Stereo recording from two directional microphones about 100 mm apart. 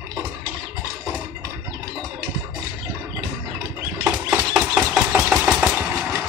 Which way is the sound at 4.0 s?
20° right (ahead or behind).